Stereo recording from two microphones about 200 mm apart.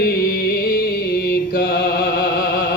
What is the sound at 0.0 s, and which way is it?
Music, 50° left (ahead or behind).